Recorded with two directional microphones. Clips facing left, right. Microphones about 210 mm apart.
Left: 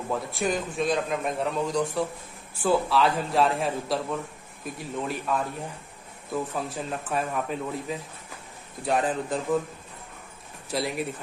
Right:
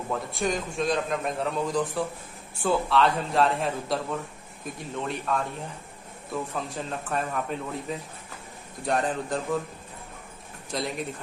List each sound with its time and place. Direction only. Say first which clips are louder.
0.1 s a man's voice: left 1 dB; centre (ahead or behind)
5.0 s a man's voice: even; 5° left (ahead or behind)
10.7 s a man's voice: left 2 dB; 5° left (ahead or behind)